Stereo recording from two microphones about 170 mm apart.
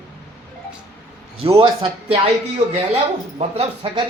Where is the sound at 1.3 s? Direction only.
30° right (ahead or behind).